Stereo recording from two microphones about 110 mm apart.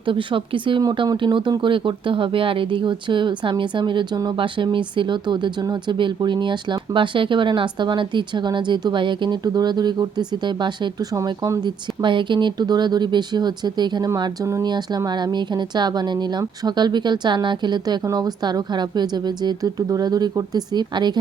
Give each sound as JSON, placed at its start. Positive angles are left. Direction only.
{"t": 0.1, "sound": "speech", "side_deg": -50}
{"t": 0.8, "sound": "speech", "side_deg": -40}
{"t": 11.1, "sound": "speech", "side_deg": -30}
{"t": 11.6, "sound": "speech", "side_deg": -45}
{"t": 14.4, "sound": "speech", "side_deg": -30}
{"t": 14.7, "sound": "speech", "side_deg": -40}